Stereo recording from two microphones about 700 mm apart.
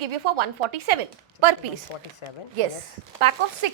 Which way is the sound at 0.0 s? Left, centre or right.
Right.